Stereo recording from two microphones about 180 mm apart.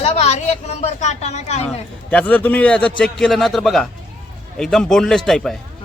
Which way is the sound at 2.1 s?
10° left (ahead or behind).